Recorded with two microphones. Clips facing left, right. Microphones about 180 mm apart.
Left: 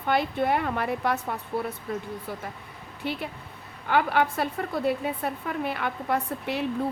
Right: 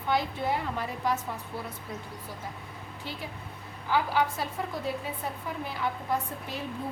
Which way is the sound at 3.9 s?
60° left (ahead or behind).